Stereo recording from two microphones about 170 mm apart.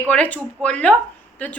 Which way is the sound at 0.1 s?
5° left (ahead or behind).